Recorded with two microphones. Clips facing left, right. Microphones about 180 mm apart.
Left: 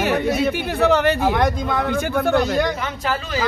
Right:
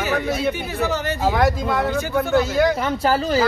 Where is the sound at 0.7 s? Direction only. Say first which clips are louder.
Left 6 dB; 60° left (ahead or behind).